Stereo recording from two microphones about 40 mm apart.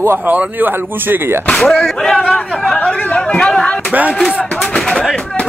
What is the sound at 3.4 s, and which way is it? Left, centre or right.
Speech, left.